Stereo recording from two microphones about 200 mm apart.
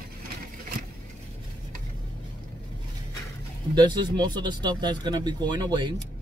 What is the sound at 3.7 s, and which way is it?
Speech, 20° right (ahead or behind).